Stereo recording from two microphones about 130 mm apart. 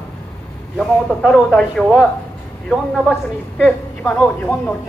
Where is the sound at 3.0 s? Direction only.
10° left (ahead or behind).